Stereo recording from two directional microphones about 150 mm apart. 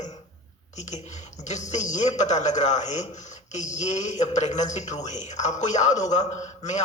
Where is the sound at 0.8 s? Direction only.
50° left (ahead or behind).